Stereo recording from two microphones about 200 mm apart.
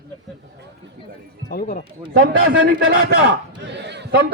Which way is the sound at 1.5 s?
50° left (ahead or behind).